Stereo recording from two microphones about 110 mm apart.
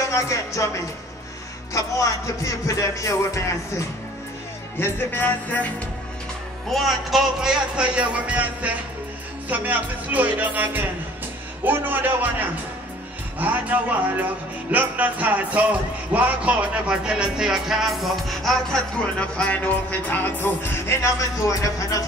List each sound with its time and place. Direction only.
0.1 s music: 30° left (ahead or behind)
1.7 s music: 30° left (ahead or behind)
6.7 s speech: centre (ahead or behind); by 22.0 s 30° left (ahead or behind)